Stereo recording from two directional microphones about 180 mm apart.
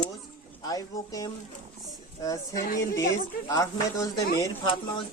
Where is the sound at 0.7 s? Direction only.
20° left (ahead or behind).